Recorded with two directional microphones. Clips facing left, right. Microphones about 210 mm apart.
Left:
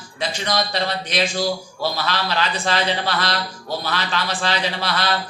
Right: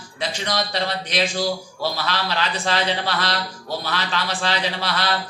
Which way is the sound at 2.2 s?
50° left (ahead or behind).